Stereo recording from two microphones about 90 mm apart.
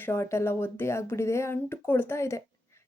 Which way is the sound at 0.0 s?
30° left (ahead or behind).